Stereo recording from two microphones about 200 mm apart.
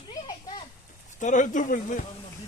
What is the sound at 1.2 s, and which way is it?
Speech, 40° left (ahead or behind).